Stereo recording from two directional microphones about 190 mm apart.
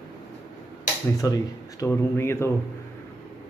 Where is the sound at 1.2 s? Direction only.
20° left (ahead or behind).